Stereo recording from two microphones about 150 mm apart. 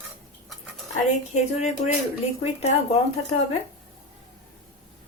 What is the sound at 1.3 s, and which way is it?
Speech, 45° left (ahead or behind).